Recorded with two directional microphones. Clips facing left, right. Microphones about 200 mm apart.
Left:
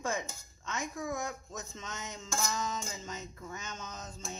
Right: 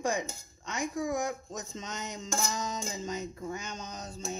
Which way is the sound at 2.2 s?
30° right (ahead or behind).